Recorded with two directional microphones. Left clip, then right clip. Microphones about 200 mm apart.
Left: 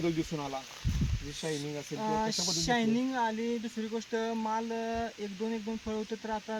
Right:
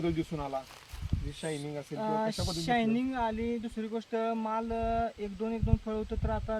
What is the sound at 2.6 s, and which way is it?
Speech, 45° right (ahead or behind).